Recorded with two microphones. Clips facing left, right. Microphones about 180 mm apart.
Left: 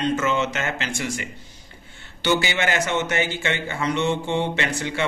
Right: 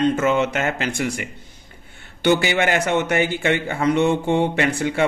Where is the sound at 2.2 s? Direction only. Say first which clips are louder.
Right 4 dB; 55° right (ahead or behind).